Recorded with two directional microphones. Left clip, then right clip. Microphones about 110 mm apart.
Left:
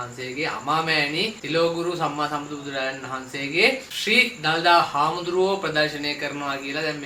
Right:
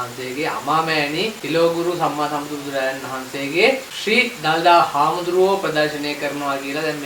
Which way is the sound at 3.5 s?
15° right (ahead or behind).